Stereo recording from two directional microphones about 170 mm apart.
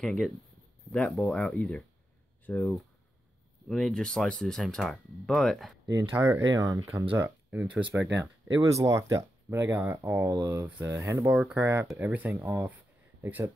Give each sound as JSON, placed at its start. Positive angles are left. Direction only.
{"t": 0.0, "sound": "speech", "side_deg": 0}
{"t": 5.9, "sound": "speech", "side_deg": -15}